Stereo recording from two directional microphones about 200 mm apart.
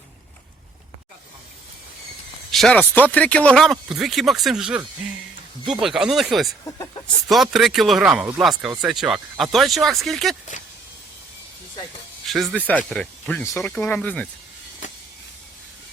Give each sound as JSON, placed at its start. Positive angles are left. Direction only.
{"t": 2.5, "sound": "speech", "side_deg": 5}
{"t": 12.2, "sound": "speech", "side_deg": 0}
{"t": 14.8, "sound": "a sound", "side_deg": 35}